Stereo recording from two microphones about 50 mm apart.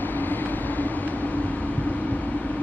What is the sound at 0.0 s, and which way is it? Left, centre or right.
Vehicle, left.